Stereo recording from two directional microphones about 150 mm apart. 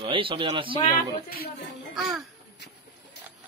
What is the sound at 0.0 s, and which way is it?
Speech, 35° right (ahead or behind).